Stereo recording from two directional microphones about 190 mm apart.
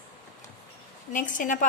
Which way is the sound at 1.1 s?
45° left (ahead or behind).